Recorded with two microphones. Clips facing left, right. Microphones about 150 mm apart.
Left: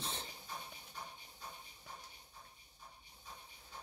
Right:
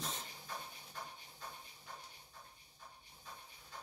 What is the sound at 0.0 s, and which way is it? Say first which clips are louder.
Dog: even; 30° left (ahead or behind).